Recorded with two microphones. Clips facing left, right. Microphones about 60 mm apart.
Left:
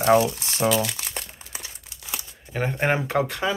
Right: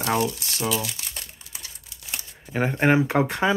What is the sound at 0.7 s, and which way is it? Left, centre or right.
Speech, left.